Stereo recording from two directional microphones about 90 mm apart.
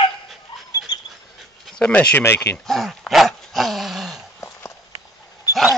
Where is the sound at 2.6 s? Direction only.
Centre (ahead or behind).